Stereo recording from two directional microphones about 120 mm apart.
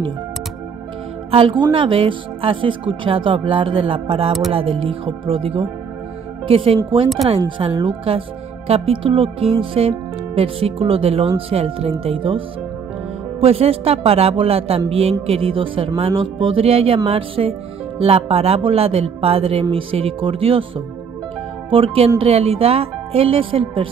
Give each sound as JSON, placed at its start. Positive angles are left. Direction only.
{"t": 1.3, "sound": "speech", "side_deg": -45}